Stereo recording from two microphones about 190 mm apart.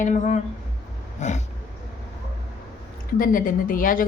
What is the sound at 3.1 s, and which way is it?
Speech, 45° left (ahead or behind).